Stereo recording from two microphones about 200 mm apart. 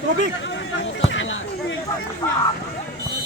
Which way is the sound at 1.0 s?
70° left (ahead or behind).